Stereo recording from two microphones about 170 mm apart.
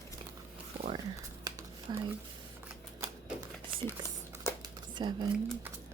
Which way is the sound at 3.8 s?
15° left (ahead or behind).